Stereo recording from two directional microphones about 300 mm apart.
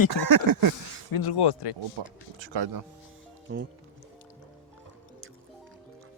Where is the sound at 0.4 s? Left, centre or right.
Right.